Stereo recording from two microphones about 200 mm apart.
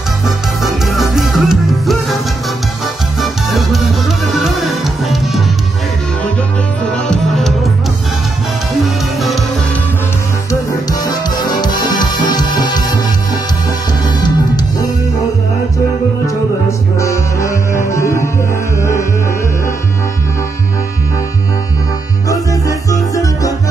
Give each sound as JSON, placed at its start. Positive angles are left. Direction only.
{"t": 0.6, "sound": "music", "side_deg": 0}
{"t": 3.2, "sound": "music", "side_deg": 0}
{"t": 6.9, "sound": "music", "side_deg": 0}
{"t": 8.8, "sound": "music", "side_deg": 0}
{"t": 10.5, "sound": "music", "side_deg": 20}
{"t": 16.6, "sound": "music", "side_deg": 15}
{"t": 22.3, "sound": "music", "side_deg": 15}